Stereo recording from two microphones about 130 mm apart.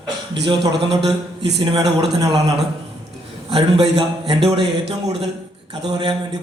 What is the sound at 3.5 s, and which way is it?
A man's voice, 40° right (ahead or behind).